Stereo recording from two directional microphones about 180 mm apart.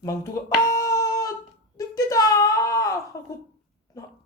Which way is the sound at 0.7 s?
20° left (ahead or behind).